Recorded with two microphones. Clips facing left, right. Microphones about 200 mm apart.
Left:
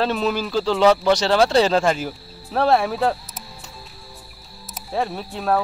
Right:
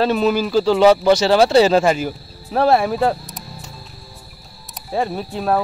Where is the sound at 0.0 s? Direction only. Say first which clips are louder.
Right 5 dB; 5° right (ahead or behind).